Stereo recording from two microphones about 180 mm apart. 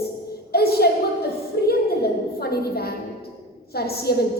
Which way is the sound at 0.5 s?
60° left (ahead or behind).